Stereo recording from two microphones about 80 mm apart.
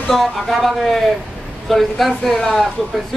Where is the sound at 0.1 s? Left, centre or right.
Centre.